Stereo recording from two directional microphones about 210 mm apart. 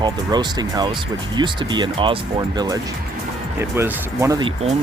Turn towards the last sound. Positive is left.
turn(degrees=-25)  # may be behind; listen again after turning